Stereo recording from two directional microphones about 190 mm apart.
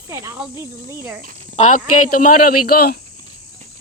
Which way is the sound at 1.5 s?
40° left (ahead or behind).